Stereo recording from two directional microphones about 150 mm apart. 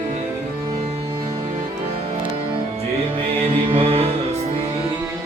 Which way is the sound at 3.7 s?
40° right (ahead or behind).